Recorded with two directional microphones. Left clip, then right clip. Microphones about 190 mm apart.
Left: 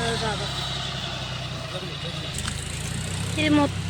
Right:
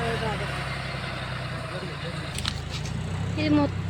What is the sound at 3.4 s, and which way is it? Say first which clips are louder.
Speech: left 3 dB; centre (ahead or behind).